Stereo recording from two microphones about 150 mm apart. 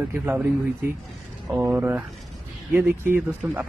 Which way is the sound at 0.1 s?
15° right (ahead or behind).